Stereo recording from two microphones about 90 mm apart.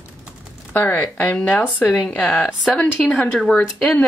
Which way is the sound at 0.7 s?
20° left (ahead or behind).